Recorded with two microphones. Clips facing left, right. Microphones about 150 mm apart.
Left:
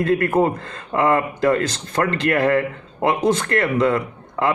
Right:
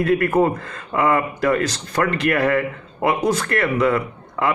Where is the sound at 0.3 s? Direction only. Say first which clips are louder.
Even; 25° left (ahead or behind).